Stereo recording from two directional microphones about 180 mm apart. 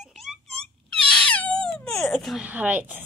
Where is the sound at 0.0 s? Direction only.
Centre (ahead or behind).